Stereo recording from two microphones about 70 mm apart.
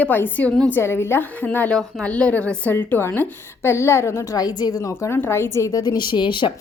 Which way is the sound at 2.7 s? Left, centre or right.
Left.